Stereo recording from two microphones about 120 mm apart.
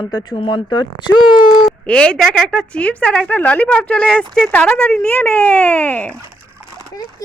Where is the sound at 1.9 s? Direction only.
10° left (ahead or behind).